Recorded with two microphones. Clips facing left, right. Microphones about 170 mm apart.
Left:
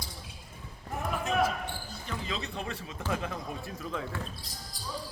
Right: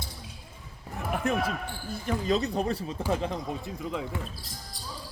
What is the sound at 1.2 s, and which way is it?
Speech, 60° right (ahead or behind).